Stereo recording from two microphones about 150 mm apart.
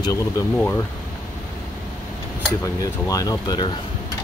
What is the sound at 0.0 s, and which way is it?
Speech, 25° left (ahead or behind).